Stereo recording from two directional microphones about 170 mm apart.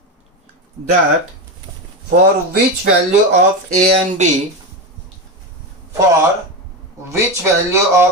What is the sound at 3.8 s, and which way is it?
Speech, 45° right (ahead or behind).